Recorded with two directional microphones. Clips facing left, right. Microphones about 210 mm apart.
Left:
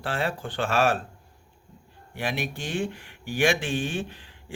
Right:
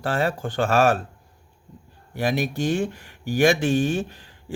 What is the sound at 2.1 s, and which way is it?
Speech, 40° right (ahead or behind).